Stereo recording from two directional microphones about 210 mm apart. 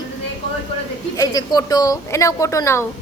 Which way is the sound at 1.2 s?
20° left (ahead or behind).